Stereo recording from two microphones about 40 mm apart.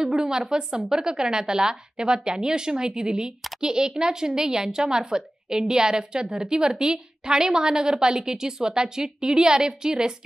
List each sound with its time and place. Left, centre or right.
0.0 s a woman's voice: centre